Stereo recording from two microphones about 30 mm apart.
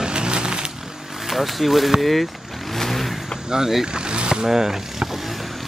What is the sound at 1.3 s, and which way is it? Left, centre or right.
Speech, centre.